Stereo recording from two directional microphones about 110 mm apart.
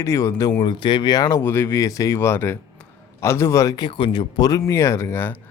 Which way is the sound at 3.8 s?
50° left (ahead or behind).